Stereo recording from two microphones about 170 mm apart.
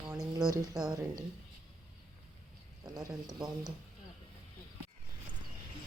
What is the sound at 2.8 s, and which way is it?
Speech, 20° right (ahead or behind).